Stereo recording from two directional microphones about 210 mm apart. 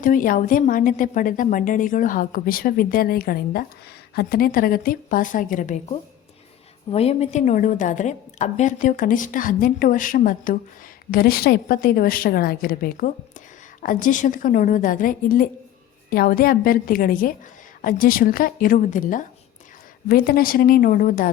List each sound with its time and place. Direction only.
0.0 s a woman's voice: 40° left (ahead or behind)